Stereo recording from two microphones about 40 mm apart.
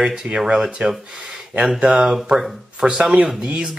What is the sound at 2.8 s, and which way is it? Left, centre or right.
Speech, centre.